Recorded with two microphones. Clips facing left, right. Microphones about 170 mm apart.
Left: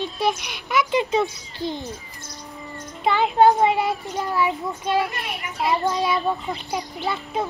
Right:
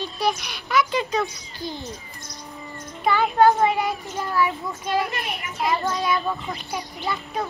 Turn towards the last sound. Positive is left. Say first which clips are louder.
# left 2 dB
turn(degrees=20)  # may be behind; listen again after turning